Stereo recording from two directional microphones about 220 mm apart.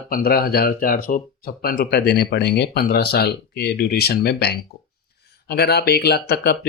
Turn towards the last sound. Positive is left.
turn(degrees=45)  # may be behind; listen again after turning